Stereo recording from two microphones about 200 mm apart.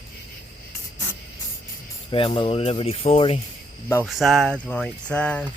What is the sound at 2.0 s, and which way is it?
Speech, 25° left (ahead or behind).